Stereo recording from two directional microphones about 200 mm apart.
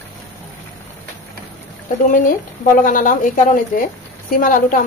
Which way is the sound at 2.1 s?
45° left (ahead or behind).